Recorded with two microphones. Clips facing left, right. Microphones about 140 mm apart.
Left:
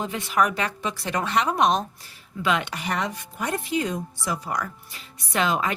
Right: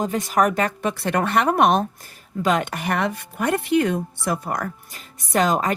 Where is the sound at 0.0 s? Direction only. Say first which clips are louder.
Right 4 dB; 40° right (ahead or behind); by 1.8 s 60° right (ahead or behind).